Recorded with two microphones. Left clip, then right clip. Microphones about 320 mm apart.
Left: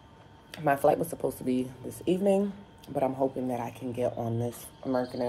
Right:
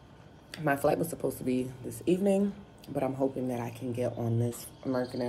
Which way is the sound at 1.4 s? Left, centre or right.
Left.